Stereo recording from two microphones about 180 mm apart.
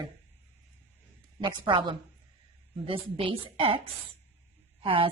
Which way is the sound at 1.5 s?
25° right (ahead or behind).